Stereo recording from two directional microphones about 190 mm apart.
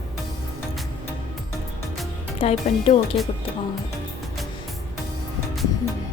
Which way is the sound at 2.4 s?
30° left (ahead or behind).